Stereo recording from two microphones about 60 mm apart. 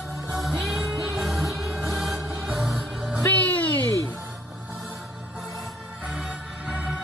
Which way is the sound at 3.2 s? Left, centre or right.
Left.